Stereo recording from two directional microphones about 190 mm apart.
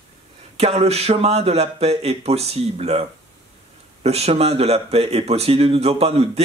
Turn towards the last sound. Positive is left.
turn(degrees=-35)  # may be behind; listen again after turning